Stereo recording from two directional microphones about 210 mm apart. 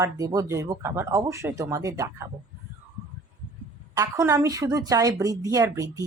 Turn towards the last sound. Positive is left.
turn(degrees=-15)  # may be behind; listen again after turning